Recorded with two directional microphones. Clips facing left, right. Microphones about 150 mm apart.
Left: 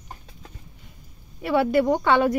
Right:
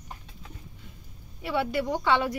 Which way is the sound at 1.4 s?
55° left (ahead or behind).